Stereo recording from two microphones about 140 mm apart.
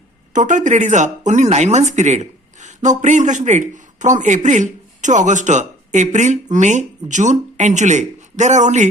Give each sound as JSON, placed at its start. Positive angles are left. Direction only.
{"t": 0.3, "sound": "speech", "side_deg": -65}